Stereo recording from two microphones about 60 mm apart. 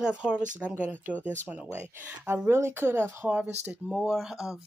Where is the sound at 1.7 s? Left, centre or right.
Right.